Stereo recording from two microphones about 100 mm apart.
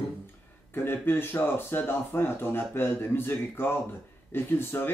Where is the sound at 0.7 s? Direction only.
20° left (ahead or behind).